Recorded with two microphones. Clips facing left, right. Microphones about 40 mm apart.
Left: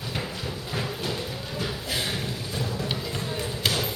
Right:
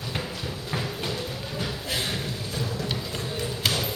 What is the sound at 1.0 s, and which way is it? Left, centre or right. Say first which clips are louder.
Music: even; centre.